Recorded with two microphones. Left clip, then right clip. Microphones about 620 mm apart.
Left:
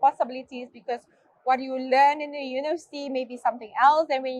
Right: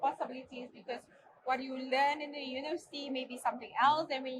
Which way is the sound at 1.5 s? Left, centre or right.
Left.